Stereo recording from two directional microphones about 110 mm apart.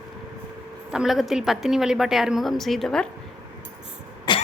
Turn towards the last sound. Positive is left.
turn(degrees=45)  # may be behind; listen again after turning